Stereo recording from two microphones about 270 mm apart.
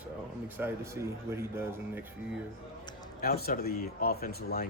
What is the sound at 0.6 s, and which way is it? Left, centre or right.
Speech, centre.